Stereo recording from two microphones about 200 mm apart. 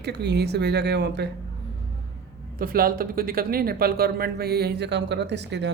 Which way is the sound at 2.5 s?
45° right (ahead or behind).